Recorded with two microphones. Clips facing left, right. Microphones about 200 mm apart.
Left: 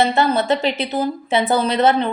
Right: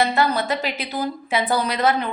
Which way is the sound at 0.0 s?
25° left (ahead or behind).